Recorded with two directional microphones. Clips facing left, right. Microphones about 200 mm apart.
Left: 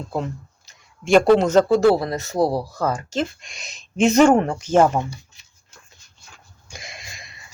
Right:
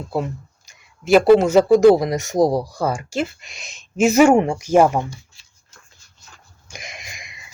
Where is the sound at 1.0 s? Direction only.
5° right (ahead or behind).